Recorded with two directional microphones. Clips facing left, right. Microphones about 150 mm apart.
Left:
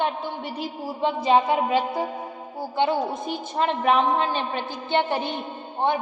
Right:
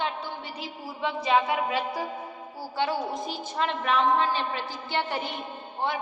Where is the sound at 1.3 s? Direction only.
30° left (ahead or behind).